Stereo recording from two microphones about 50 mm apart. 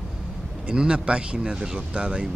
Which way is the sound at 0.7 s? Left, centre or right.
Centre.